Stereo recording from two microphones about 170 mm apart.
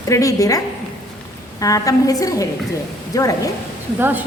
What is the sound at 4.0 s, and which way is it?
Speech, 10° right (ahead or behind).